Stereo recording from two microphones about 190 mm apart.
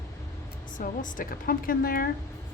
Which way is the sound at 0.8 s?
45° left (ahead or behind).